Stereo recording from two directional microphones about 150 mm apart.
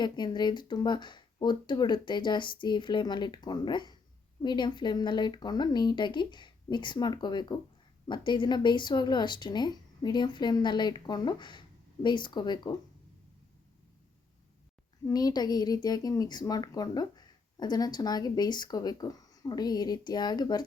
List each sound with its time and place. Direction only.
0.0 s a woman's voice: 30° left (ahead or behind)
15.0 s a woman's voice: 25° left (ahead or behind)